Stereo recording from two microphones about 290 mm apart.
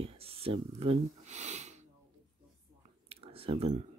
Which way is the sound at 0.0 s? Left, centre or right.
Centre.